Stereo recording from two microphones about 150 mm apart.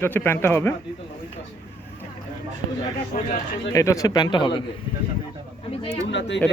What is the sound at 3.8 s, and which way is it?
Speech, 20° left (ahead or behind).